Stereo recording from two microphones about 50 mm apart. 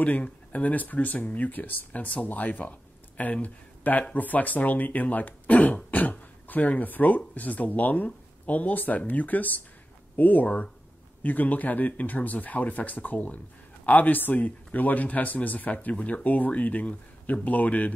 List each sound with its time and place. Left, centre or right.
0.0 s a man's voice: left